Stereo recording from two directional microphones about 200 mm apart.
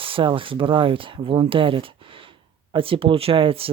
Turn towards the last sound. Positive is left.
turn(degrees=-25)  # may be behind; listen again after turning